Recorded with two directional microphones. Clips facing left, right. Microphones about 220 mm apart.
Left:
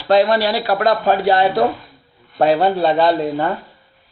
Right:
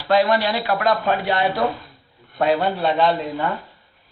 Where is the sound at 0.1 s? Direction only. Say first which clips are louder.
Left 4 dB; 35° left (ahead or behind).